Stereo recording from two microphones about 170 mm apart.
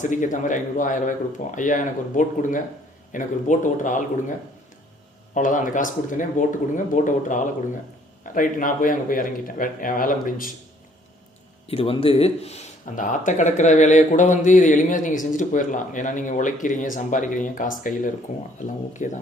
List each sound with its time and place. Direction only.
0.0 s speech: 50° left (ahead or behind)
5.3 s speech: 50° left (ahead or behind)
11.7 s speech: 35° left (ahead or behind); by 19.1 s 50° left (ahead or behind)